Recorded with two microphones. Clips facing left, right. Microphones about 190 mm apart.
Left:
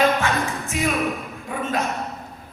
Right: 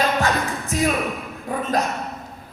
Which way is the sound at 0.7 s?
40° right (ahead or behind).